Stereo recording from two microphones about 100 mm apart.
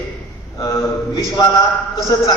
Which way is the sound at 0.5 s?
30° left (ahead or behind).